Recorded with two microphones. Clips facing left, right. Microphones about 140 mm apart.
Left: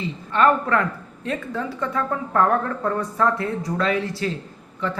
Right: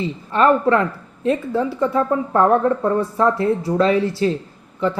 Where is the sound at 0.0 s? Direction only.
30° right (ahead or behind).